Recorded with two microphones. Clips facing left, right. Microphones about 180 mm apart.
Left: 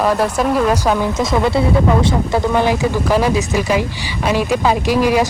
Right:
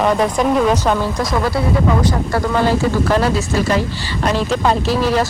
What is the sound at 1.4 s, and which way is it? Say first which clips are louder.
Speech: left 3 dB; 25° left (ahead or behind).